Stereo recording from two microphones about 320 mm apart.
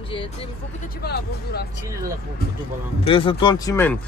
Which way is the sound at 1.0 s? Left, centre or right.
Left.